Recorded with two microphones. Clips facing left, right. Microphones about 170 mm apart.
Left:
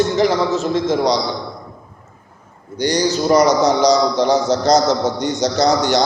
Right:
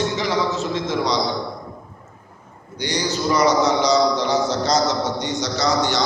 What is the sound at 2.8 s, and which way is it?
A man's voice, 40° left (ahead or behind).